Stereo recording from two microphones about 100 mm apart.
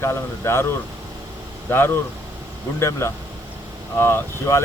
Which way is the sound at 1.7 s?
20° left (ahead or behind).